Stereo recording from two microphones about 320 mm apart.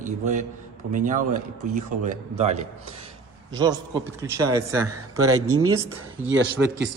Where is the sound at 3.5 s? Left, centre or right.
Centre.